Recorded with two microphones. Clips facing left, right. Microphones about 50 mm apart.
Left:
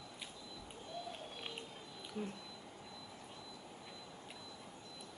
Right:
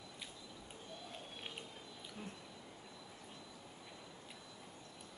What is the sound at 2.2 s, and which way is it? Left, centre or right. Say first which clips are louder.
Speech: left 8 dB; left.